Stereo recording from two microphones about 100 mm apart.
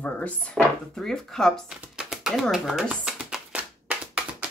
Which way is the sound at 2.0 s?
5° right (ahead or behind).